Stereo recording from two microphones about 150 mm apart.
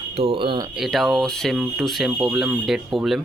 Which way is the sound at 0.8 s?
Centre (ahead or behind).